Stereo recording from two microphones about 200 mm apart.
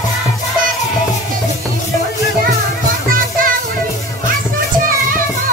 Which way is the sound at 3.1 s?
45° right (ahead or behind).